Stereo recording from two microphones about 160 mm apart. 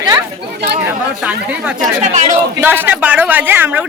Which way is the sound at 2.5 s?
15° right (ahead or behind).